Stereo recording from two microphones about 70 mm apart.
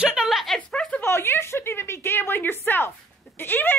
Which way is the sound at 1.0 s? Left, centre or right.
Left.